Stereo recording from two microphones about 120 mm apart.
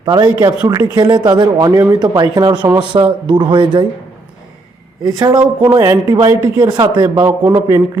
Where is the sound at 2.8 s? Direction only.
45° right (ahead or behind).